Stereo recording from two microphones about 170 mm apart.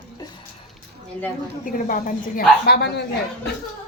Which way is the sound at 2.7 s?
75° left (ahead or behind).